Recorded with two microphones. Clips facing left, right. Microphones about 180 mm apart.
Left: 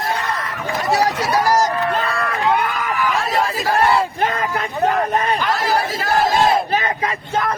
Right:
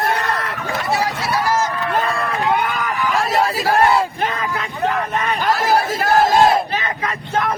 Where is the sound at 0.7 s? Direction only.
40° left (ahead or behind).